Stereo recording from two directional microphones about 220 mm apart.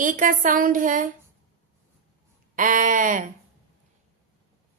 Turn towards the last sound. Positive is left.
turn(degrees=-35)  # may be behind; listen again after turning